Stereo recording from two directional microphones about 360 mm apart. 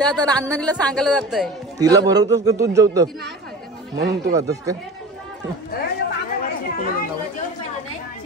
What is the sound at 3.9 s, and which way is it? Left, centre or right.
Speech, right.